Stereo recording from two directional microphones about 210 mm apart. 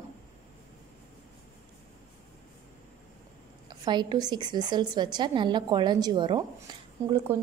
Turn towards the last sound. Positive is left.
turn(degrees=-20)  # may be behind; listen again after turning